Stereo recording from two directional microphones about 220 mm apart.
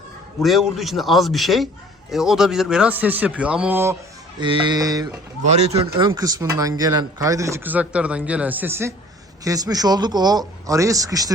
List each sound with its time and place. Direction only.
0.4 s a man's voice: centre (ahead or behind)
4.4 s speech: 20° right (ahead or behind)
5.5 s speech: 30° right (ahead or behind)
5.9 s speech: 15° right (ahead or behind)